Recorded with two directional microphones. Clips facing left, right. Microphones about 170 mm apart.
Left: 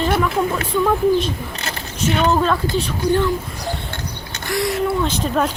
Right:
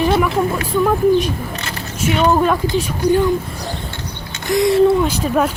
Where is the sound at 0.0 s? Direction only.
10° right (ahead or behind).